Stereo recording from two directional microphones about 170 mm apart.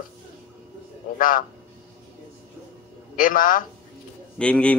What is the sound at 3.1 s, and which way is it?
Speech, 55° left (ahead or behind).